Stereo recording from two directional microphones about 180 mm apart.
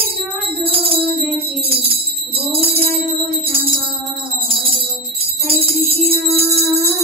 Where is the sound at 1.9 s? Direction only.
30° right (ahead or behind).